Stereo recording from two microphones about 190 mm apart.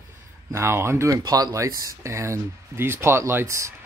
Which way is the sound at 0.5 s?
15° right (ahead or behind).